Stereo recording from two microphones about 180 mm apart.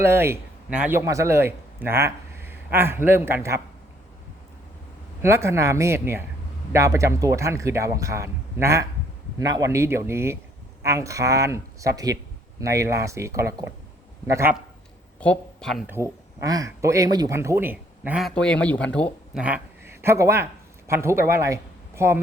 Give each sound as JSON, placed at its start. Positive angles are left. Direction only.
{"t": 0.0, "sound": "a man's voice", "side_deg": -15}
{"t": 5.2, "sound": "speech", "side_deg": -15}
{"t": 15.2, "sound": "speech", "side_deg": 5}
{"t": 15.9, "sound": "speech", "side_deg": -15}
{"t": 19.3, "sound": "a man's voice", "side_deg": -5}